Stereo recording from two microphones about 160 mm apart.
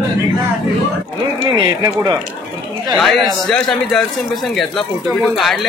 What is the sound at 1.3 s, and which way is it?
Speech, 30° right (ahead or behind).